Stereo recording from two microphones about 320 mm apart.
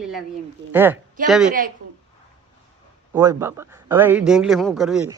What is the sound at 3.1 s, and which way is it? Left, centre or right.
A man's voice, centre.